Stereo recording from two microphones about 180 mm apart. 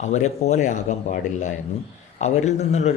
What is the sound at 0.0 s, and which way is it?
A man's voice, 40° left (ahead or behind).